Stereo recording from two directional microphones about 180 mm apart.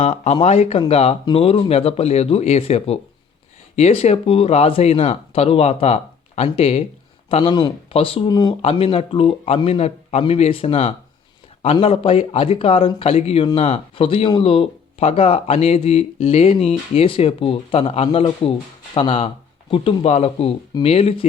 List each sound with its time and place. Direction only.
0.0 s speech: 35° left (ahead or behind)